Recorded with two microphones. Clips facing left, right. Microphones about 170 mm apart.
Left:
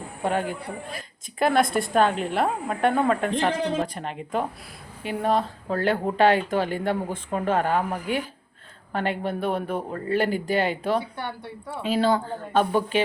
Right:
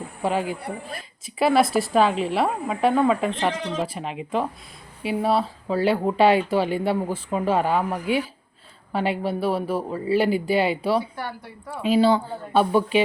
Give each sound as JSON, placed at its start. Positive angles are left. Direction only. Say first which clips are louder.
{"t": 0.3, "sound": "a woman's voice", "louder": "right 1 dB", "side_deg": -5}
{"t": 11.2, "sound": "a woman's voice", "louder": "even", "side_deg": 25}
{"t": 11.9, "sound": "speech", "louder": "right 4 dB", "side_deg": -10}